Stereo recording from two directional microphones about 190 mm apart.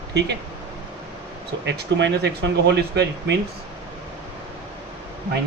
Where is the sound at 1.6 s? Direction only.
65° right (ahead or behind).